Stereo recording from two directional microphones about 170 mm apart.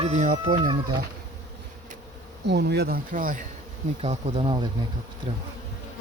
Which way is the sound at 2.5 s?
80° right.